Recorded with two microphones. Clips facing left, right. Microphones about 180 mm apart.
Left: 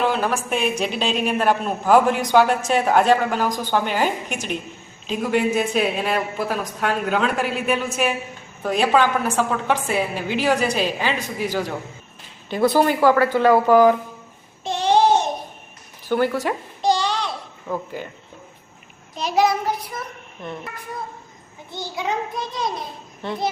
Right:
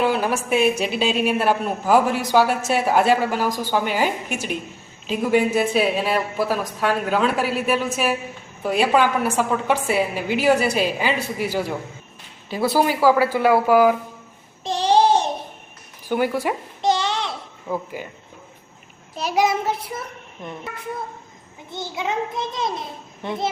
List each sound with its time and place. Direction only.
0.0 s a sound: 10° right (ahead or behind)
0.5 s a woman's voice: 5° right (ahead or behind)
14.6 s child singing: 35° right (ahead or behind)
16.0 s a woman's voice: 10° right (ahead or behind)
16.8 s a sound: 20° right (ahead or behind)
17.7 s a woman's voice: 10° right (ahead or behind)
19.1 s a woman's voice: 5° right (ahead or behind)
19.5 s a child's voice: 25° right (ahead or behind)
21.7 s a child's voice: 20° right (ahead or behind)